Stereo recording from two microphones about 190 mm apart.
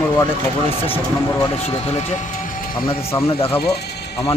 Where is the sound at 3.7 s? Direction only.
60° left (ahead or behind).